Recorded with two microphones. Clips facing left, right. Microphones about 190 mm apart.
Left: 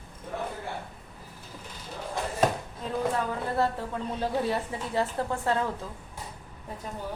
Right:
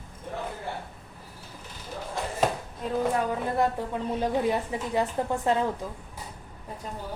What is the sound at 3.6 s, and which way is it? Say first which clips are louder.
A woman's voice: right 1 dB; 15° right (ahead or behind).